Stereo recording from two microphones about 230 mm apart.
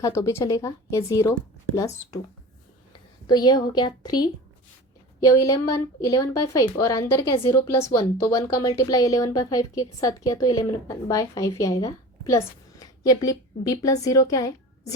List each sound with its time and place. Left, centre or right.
0.0 s a woman's voice: centre
3.2 s a woman's voice: centre